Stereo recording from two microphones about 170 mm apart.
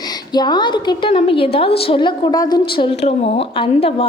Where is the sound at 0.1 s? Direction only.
25° left (ahead or behind).